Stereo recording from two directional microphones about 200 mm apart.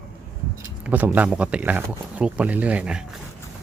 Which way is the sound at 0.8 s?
10° right (ahead or behind).